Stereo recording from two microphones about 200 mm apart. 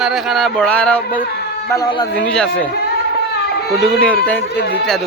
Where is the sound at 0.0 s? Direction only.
Centre (ahead or behind).